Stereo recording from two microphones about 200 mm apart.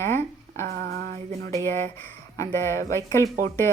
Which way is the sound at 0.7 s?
50° right (ahead or behind).